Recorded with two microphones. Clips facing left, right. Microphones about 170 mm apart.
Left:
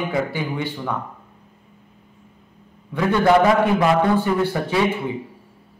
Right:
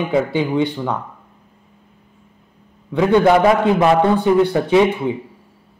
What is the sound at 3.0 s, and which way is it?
A man's voice, 20° right (ahead or behind).